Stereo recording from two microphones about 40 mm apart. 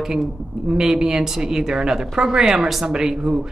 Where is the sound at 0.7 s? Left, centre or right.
Centre.